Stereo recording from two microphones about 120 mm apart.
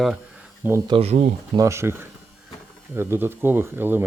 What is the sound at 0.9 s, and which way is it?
Speech, 50° right (ahead or behind).